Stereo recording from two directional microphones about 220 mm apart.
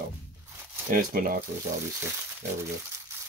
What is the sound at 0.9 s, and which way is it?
Speech, 40° right (ahead or behind).